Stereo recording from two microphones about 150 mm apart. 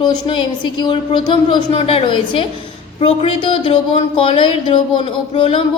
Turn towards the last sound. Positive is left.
turn(degrees=40)  # may be behind; listen again after turning